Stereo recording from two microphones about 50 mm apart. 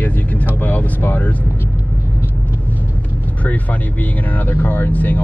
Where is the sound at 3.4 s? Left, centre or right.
Left.